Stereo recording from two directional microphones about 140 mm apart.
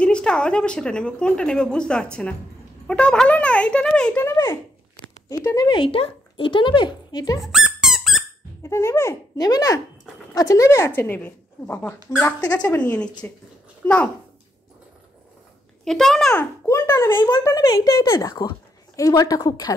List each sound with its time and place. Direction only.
0.0 s speech: 5° left (ahead or behind); by 5.8 s 20° left (ahead or behind)
5.8 s speech: 40° left (ahead or behind)
7.3 s squeak: centre (ahead or behind)
8.6 s speech: 20° left (ahead or behind)
15.8 s a child's voice: centre (ahead or behind)
16.3 s speech: 20° left (ahead or behind)